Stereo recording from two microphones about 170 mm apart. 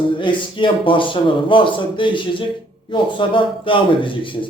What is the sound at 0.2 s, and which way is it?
A man's voice, 30° left (ahead or behind).